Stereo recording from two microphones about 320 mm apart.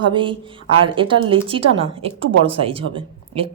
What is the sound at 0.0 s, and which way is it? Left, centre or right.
A woman's voice, centre.